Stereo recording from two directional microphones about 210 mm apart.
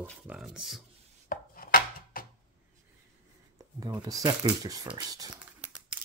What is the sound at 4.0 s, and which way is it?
Speech, 15° right (ahead or behind).